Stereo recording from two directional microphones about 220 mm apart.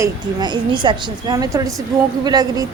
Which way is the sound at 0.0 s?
20° right (ahead or behind).